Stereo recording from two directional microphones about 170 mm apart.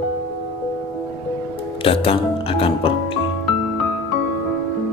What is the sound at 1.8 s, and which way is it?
Speech, 35° left (ahead or behind).